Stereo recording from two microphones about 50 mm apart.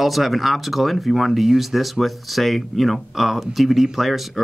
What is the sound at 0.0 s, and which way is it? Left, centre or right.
Speech, centre.